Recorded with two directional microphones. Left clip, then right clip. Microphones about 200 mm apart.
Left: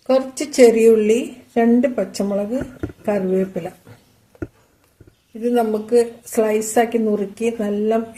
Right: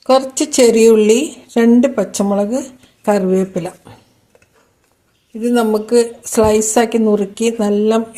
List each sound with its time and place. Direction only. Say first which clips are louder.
0.1 s a woman's voice: right 5 dB; 35° right (ahead or behind)
5.4 s a woman's voice: right 4 dB; 35° right (ahead or behind)